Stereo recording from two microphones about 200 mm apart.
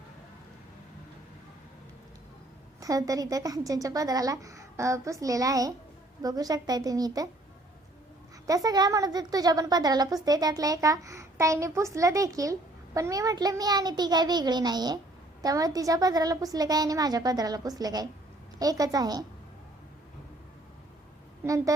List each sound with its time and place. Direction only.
2.8 s a child's voice: 15° right (ahead or behind)
8.4 s a woman's voice: 20° right (ahead or behind)
21.4 s a child's voice: 15° right (ahead or behind)